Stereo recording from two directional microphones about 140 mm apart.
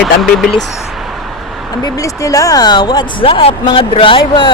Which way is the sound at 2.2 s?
25° left (ahead or behind).